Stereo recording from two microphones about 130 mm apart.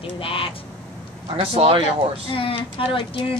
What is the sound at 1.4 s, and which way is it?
Speech, 50° right (ahead or behind).